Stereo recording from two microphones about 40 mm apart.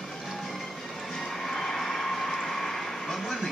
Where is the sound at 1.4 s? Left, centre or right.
Centre.